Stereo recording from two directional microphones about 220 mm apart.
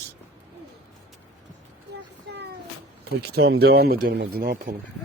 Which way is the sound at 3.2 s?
45° right (ahead or behind).